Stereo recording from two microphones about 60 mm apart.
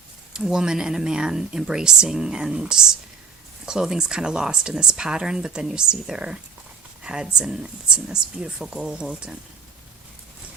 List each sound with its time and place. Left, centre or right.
0.3 s speech: centre